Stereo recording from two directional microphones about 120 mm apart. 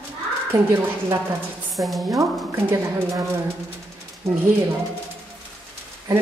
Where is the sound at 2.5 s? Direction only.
20° right (ahead or behind).